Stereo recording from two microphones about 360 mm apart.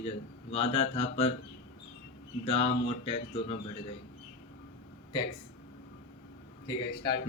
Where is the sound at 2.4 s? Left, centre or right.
Centre.